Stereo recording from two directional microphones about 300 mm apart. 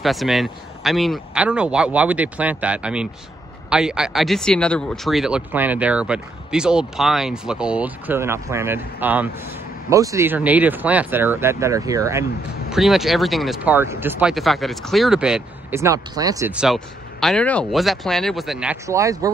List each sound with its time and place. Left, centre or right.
0.0 s speech: centre